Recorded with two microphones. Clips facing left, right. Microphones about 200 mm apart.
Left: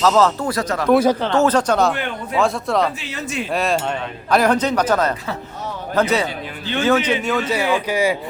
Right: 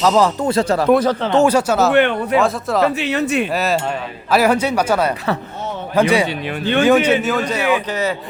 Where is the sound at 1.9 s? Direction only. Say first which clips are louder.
Right 11 dB; 70° right (ahead or behind).